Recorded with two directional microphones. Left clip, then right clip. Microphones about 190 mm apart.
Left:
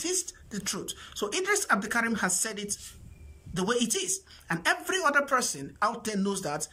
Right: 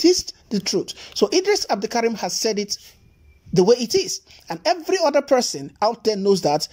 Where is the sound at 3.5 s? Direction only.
25° right (ahead or behind).